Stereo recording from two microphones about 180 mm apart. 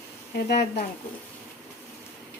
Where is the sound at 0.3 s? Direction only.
60° left (ahead or behind).